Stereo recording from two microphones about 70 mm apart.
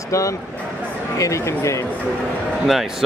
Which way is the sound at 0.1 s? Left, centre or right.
Left.